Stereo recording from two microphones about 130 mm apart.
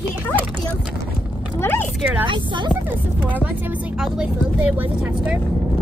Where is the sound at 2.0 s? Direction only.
10° right (ahead or behind).